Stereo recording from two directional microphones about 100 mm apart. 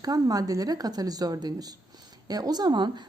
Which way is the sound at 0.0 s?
40° right (ahead or behind).